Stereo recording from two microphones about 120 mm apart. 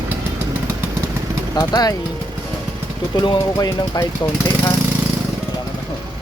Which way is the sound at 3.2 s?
35° left (ahead or behind).